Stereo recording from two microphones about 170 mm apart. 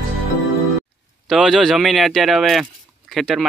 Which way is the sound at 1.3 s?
Centre (ahead or behind).